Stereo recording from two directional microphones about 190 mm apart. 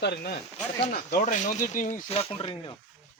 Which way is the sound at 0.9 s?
40° left (ahead or behind).